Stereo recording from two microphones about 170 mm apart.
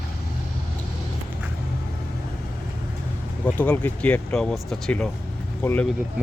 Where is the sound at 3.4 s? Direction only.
10° left (ahead or behind).